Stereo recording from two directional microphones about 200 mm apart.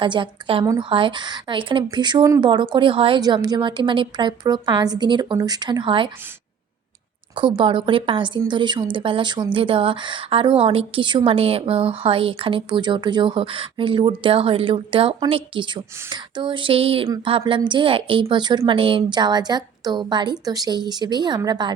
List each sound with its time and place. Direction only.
0.0 s speech: 25° right (ahead or behind)
7.3 s speech: 25° right (ahead or behind)